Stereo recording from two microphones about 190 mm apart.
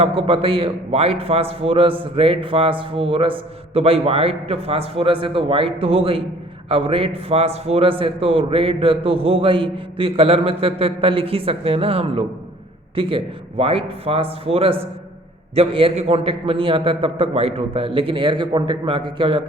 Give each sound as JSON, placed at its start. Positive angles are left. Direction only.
{"t": 0.0, "sound": "a man's voice", "side_deg": -30}